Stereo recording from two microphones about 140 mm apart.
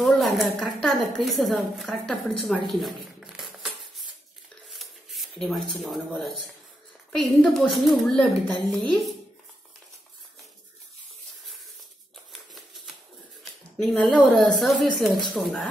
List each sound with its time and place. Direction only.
0.0 s a woman's voice: centre (ahead or behind)
2.7 s a sound: centre (ahead or behind)
4.6 s rub: centre (ahead or behind)
5.8 s a woman's voice: centre (ahead or behind)
12.3 s a sound: centre (ahead or behind)
13.4 s a woman's voice: centre (ahead or behind)